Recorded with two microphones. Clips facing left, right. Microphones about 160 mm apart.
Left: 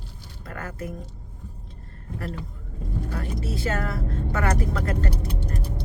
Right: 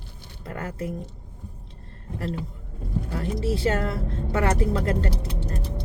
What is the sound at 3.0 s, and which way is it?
Speech, 25° right (ahead or behind).